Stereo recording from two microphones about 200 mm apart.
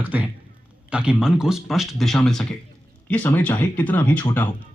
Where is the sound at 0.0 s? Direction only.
10° right (ahead or behind).